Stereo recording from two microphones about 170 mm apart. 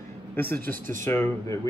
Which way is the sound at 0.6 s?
55° right (ahead or behind).